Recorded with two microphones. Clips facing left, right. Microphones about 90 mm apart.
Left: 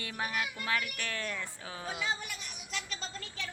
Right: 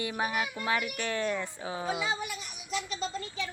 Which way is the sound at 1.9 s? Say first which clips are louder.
Right 2 dB; 5° right (ahead or behind).